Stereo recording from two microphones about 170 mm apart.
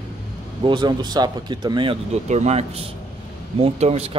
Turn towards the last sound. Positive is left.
turn(degrees=-35)  # may be behind; listen again after turning